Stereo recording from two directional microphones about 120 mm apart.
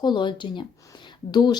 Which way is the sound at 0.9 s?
40° left (ahead or behind).